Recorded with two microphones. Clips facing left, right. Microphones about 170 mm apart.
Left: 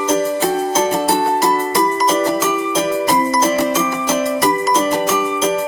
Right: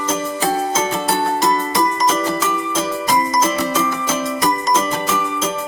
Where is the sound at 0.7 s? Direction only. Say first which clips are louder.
Left 4 dB; 40° left (ahead or behind).